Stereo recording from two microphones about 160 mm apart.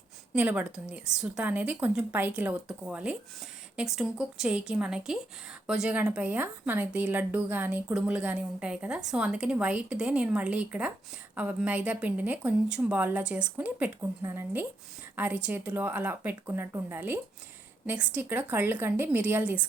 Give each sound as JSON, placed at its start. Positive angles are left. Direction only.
{"t": 0.3, "sound": "a woman's voice", "side_deg": -10}